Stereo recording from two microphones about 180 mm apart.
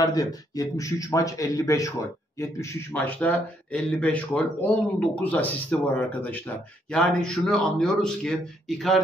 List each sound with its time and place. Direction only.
0.0 s speech: 20° left (ahead or behind); by 9.0 s centre (ahead or behind)